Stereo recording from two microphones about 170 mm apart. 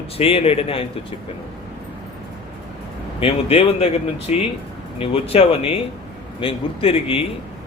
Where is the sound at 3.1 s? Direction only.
35° left (ahead or behind).